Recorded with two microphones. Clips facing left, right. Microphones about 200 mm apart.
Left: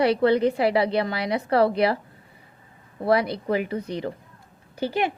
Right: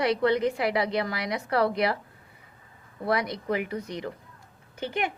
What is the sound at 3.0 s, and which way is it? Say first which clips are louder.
A woman's voice: left 5 dB; 30° left (ahead or behind).